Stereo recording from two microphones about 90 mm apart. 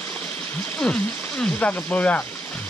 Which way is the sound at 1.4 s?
15° left (ahead or behind).